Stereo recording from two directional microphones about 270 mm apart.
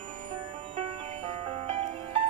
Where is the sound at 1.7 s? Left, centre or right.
Right.